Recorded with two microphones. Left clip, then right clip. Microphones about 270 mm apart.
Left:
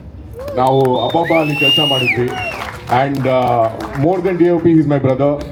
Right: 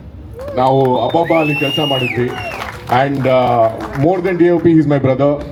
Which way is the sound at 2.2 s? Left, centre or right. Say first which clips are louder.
Left 1 dB; centre.